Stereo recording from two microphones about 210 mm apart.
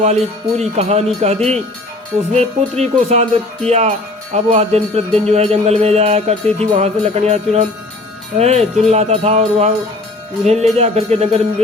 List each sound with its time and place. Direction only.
0.0 s music: 35° right (ahead or behind)